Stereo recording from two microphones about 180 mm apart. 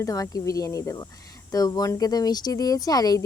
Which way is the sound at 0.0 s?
20° left (ahead or behind).